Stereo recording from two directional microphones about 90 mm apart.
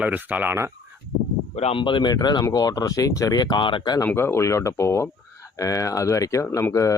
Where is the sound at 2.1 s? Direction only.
45° left (ahead or behind); by 3.9 s 70° left (ahead or behind).